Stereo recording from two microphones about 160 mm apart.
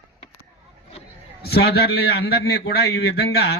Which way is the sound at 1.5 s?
80° left.